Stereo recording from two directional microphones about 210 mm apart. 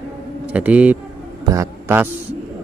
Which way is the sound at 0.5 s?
5° right (ahead or behind).